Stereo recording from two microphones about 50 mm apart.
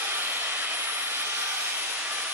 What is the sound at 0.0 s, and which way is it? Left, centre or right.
Vehicle, right.